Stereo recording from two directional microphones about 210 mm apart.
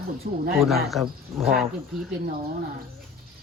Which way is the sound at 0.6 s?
Centre (ahead or behind).